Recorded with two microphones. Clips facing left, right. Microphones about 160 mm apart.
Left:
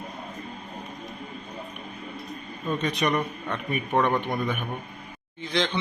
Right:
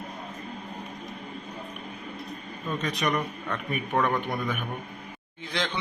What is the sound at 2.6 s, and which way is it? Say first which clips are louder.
A man's voice: left 3 dB; centre (ahead or behind).